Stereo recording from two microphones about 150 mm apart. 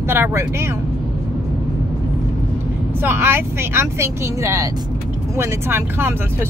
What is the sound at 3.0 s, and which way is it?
Speech, 15° right (ahead or behind).